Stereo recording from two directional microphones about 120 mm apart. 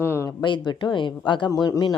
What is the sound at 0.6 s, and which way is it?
Speech, 40° left (ahead or behind).